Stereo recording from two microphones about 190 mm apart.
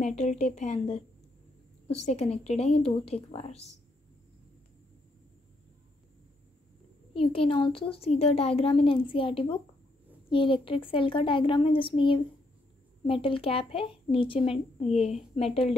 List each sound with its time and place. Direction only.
0.0 s a woman's voice: 35° left (ahead or behind)
7.3 s a woman's voice: 25° left (ahead or behind)